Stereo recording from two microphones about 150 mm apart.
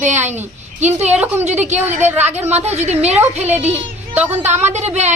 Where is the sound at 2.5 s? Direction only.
45° right (ahead or behind).